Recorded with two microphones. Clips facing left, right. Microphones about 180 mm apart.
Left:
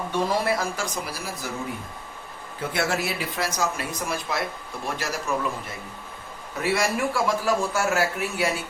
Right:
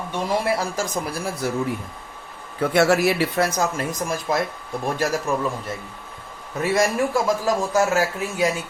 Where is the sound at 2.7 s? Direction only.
70° right (ahead or behind).